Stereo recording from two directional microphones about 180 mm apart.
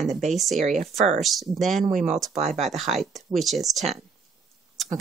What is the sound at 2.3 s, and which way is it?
Speech, 35° right (ahead or behind).